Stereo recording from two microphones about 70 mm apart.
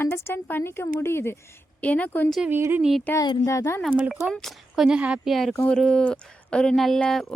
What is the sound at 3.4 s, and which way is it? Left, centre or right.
Speech, left.